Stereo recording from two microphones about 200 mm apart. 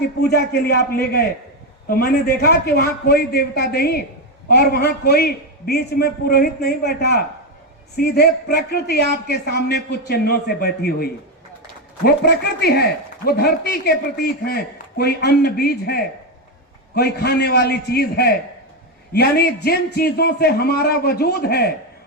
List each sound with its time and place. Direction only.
0.2 s a man's voice: 55° left (ahead or behind)